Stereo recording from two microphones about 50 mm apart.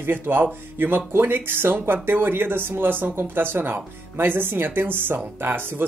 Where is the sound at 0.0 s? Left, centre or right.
Right.